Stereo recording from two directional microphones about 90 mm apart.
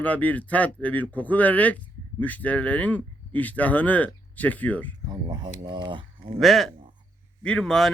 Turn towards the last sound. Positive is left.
turn(degrees=5)  # may be behind; listen again after turning